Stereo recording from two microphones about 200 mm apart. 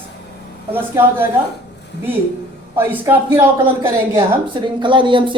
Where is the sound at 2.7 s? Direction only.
10° right (ahead or behind).